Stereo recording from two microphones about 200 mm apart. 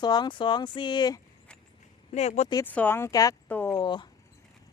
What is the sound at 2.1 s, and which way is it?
Speech, 35° left (ahead or behind).